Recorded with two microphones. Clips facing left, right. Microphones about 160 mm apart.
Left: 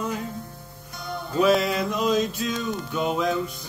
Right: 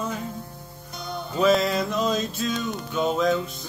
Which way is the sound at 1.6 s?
10° left (ahead or behind).